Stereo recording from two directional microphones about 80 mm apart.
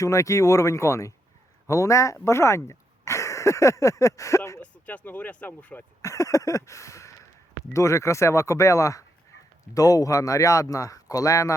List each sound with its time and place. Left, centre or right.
0.0 s speech: left
4.6 s speech: centre
6.0 s speech: left